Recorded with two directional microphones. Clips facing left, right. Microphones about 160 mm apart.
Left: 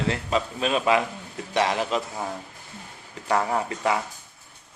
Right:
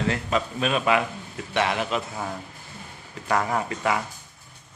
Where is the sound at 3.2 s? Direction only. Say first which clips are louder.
Left 1 dB; 30° left (ahead or behind).